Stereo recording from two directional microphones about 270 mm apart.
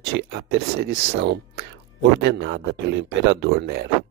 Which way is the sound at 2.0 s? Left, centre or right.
Right.